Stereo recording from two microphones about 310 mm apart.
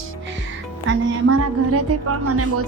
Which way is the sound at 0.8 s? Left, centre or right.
Right.